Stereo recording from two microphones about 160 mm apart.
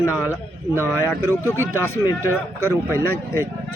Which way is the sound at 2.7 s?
15° right (ahead or behind).